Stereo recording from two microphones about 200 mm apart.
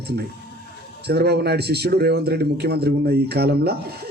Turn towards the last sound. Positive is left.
turn(degrees=-55)  # may be behind; listen again after turning